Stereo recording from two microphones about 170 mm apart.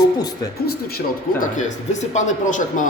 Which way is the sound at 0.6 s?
65° left (ahead or behind).